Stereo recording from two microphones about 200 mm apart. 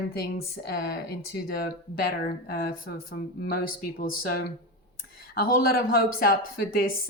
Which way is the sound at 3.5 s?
45° left (ahead or behind).